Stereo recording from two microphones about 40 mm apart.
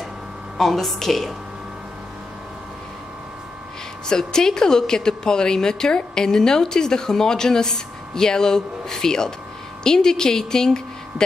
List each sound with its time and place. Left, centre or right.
0.6 s a woman's voice: centre
4.1 s a woman's voice: centre